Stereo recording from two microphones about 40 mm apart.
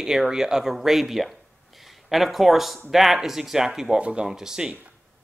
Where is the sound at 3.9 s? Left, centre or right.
Right.